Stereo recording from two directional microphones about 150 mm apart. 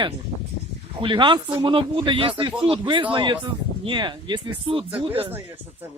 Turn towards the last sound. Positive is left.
turn(degrees=-40)  # may be behind; listen again after turning